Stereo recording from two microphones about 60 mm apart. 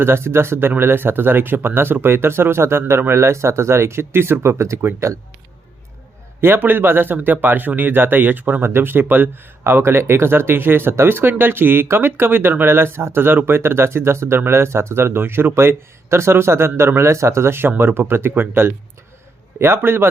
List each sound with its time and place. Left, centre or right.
0.0 s speech: right
6.4 s speech: right